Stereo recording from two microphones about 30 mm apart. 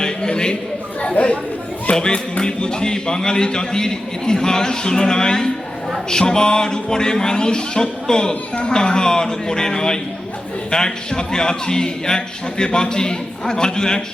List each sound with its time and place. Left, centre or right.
0.0 s a sound: left
1.2 s speech: left
1.9 s speech: left
8.3 s speech: left